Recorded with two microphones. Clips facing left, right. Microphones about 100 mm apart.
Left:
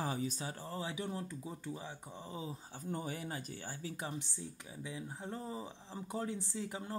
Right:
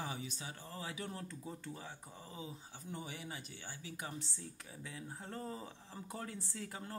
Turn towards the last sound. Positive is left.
turn(degrees=15)  # may be behind; listen again after turning